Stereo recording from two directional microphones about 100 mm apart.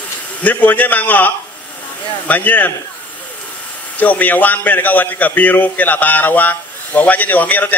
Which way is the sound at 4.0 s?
15° left (ahead or behind).